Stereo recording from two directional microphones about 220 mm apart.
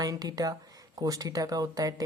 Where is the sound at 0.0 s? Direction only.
15° right (ahead or behind).